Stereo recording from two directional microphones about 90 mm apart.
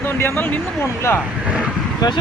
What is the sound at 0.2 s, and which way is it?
Speech, 25° left (ahead or behind).